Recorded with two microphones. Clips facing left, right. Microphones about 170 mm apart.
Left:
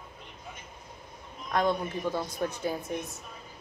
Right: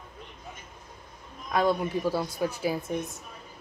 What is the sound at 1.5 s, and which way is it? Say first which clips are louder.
Speech: right 3 dB; 5° right (ahead or behind).